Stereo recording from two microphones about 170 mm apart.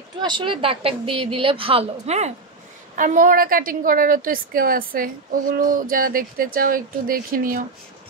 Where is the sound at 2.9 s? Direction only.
50° right (ahead or behind).